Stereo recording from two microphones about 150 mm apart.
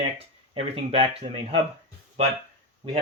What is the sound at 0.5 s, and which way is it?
Speech, 40° right (ahead or behind).